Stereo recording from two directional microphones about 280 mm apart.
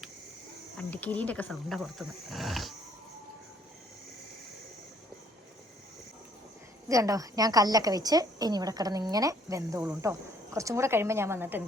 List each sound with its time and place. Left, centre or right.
0.8 s speech: centre
6.8 s a woman's voice: centre